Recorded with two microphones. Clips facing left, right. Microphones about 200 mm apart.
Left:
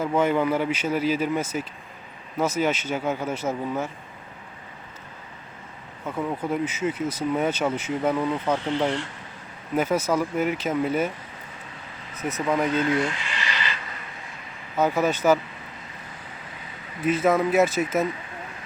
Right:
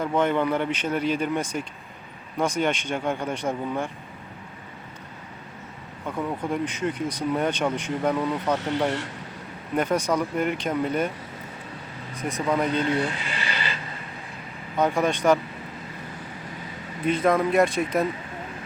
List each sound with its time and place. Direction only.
0.0 s speech: 5° left (ahead or behind)
6.1 s speech: 5° left (ahead or behind)
9.7 s speech: 5° left (ahead or behind)
12.2 s speech: 5° left (ahead or behind)
12.9 s speech: 35° right (ahead or behind)
14.8 s speech: 5° left (ahead or behind)
17.0 s speech: 5° left (ahead or behind)